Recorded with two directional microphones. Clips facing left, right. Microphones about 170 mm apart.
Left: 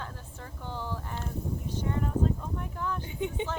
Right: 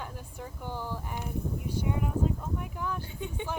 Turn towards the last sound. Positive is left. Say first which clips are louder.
# left 5 dB
turn(degrees=20)  # may be behind; listen again after turning